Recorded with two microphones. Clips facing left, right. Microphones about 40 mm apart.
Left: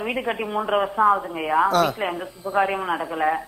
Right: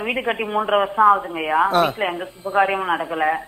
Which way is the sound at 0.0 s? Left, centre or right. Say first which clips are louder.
Right 3 dB; right.